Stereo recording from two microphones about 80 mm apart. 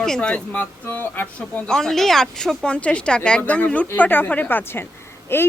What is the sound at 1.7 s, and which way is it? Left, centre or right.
A woman's voice, centre.